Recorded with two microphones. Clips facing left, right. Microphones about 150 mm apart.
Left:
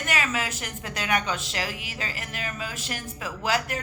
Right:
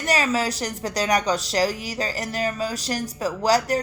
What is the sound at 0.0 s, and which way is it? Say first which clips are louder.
A woman's voice: right 6 dB; 35° right (ahead or behind).